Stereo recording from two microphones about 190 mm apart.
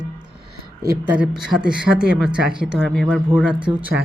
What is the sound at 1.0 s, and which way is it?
Speech, 5° right (ahead or behind).